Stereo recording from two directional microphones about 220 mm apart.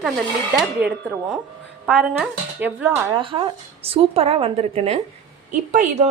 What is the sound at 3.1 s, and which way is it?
A woman's voice, 25° right (ahead or behind).